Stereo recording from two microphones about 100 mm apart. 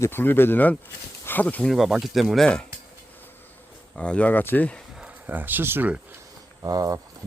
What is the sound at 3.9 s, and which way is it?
Speech, 10° left (ahead or behind).